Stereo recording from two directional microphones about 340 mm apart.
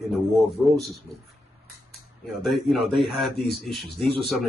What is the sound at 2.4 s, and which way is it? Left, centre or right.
A man's voice, centre.